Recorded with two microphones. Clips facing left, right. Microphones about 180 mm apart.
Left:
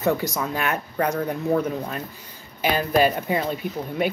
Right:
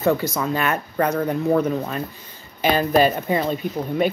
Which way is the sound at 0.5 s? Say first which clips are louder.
Right 5 dB; 10° left (ahead or behind).